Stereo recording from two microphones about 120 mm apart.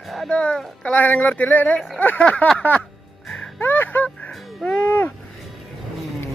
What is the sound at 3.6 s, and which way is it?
Music, 15° left (ahead or behind).